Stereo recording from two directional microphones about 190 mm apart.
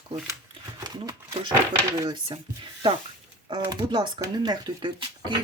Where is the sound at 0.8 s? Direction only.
20° right (ahead or behind).